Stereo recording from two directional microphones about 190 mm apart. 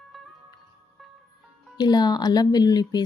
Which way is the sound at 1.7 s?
20° left (ahead or behind).